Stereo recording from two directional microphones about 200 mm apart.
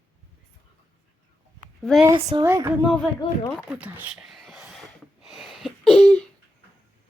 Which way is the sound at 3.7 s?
10° right (ahead or behind).